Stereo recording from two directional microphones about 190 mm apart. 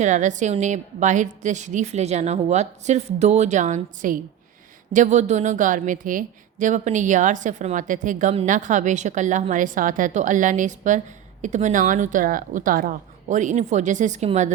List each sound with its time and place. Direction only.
0.0 s a woman's voice: 40° right (ahead or behind)